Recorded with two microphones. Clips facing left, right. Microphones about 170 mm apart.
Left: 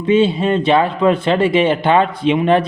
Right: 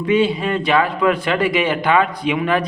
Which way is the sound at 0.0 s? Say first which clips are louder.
Left 3 dB; 25° left (ahead or behind).